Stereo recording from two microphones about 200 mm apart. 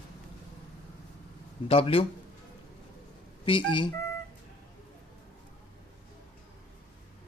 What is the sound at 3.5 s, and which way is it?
Speech, 25° left (ahead or behind).